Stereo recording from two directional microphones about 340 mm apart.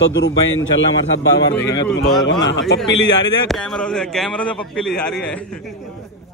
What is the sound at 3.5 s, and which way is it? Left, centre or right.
A man's voice, centre.